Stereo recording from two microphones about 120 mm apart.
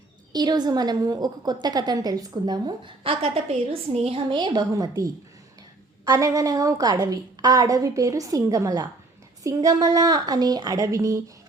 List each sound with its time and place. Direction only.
0.3 s a woman's voice: 35° right (ahead or behind)